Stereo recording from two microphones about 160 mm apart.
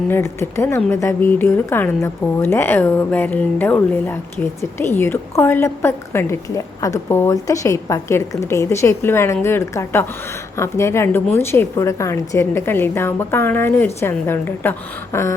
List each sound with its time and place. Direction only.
0.1 s a woman's voice: 15° left (ahead or behind)